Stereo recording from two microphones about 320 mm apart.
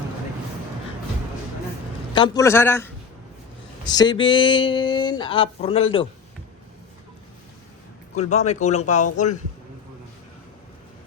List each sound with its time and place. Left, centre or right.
2.1 s speech: centre
8.2 s speech: left